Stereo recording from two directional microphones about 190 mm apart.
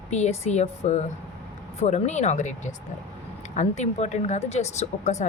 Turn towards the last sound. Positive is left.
turn(degrees=35)  # may be behind; listen again after turning